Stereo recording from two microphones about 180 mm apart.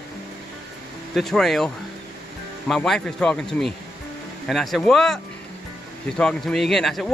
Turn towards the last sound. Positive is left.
turn(degrees=0)  # may be behind; listen again after turning